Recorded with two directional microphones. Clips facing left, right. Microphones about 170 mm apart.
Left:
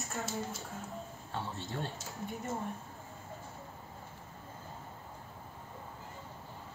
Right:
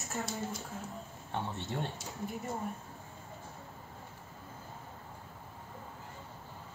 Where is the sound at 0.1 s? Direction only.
Centre (ahead or behind).